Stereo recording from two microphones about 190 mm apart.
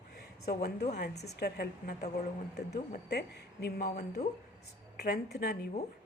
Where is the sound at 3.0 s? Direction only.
60° left (ahead or behind).